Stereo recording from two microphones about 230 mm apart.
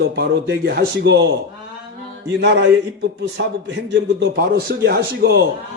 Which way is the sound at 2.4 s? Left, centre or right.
Right.